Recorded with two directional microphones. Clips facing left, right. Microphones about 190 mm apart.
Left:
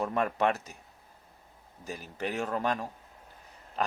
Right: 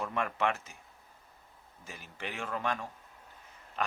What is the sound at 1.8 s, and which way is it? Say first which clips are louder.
Speech: left 8 dB; 40° left (ahead or behind).